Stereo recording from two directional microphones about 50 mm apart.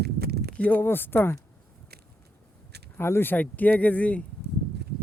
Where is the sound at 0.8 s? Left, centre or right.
Left.